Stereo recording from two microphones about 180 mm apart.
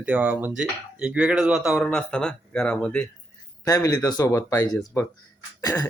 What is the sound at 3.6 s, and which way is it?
Speech, 20° left (ahead or behind).